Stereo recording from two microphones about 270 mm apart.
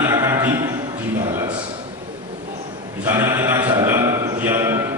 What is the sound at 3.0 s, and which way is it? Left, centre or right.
Speech, centre.